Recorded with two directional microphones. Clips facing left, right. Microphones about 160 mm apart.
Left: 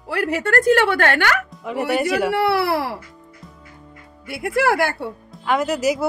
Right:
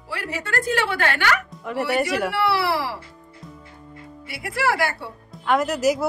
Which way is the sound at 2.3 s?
50° left (ahead or behind).